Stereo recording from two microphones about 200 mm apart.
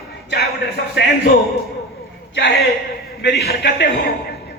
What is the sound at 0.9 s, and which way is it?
Speech, 55° left (ahead or behind).